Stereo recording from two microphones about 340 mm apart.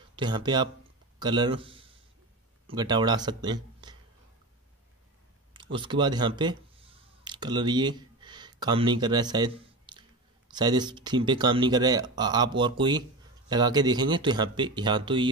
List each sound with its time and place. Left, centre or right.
0.1 s speech: centre
5.5 s a sound: centre
10.5 s speech: centre